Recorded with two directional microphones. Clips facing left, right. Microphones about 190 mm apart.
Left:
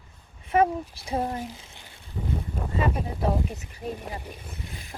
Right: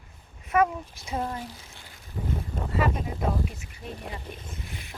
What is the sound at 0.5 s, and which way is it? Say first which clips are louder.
Speech: left 2 dB; 30° left (ahead or behind).